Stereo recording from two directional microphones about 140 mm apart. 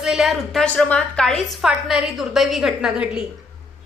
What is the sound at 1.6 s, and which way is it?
A woman's voice, 5° right (ahead or behind).